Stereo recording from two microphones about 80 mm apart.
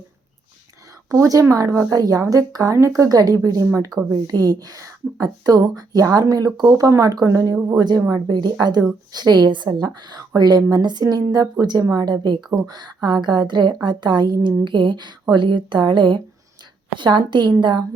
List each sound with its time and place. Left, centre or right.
1.1 s speech: right
8.3 s speech: right